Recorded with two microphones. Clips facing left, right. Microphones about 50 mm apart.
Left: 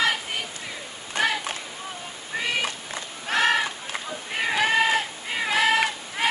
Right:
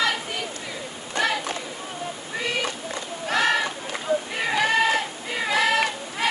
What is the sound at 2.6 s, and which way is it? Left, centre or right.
Run, centre.